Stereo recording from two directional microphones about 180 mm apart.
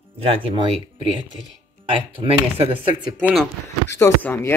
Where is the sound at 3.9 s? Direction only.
15° left (ahead or behind).